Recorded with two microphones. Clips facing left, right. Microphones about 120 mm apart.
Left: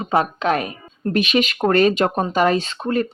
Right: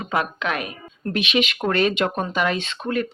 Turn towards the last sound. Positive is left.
turn(degrees=35)  # may be behind; listen again after turning